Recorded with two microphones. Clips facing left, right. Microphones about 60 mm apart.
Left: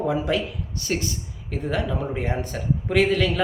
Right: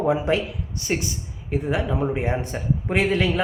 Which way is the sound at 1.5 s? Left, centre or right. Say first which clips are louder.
Right 2 dB; centre.